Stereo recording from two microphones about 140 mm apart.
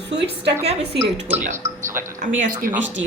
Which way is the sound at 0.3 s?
50° right (ahead or behind).